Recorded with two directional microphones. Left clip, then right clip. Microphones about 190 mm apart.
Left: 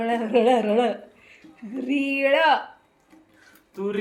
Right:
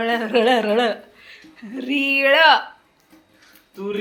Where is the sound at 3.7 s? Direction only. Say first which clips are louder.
Right 1 dB; 10° left (ahead or behind).